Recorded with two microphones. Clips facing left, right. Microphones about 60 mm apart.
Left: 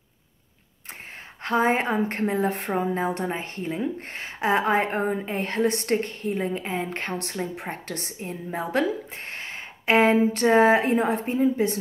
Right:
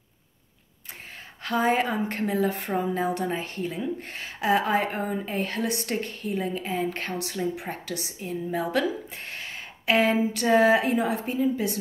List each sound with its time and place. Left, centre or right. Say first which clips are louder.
1.4 s a woman's voice: left 1 dB; left
8.5 s a woman's voice: left 1 dB; left